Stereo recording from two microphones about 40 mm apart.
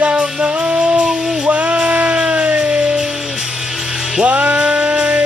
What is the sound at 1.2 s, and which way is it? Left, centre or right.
Music, centre.